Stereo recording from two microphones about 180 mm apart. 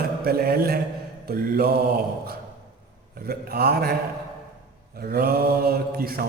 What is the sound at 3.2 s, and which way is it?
Speech, 55° right (ahead or behind).